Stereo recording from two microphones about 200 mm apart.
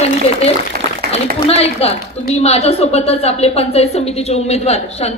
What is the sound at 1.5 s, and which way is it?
A woman's voice, 30° left (ahead or behind).